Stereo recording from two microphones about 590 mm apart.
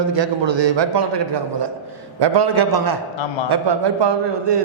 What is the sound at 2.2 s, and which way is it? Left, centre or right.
A man's voice, right.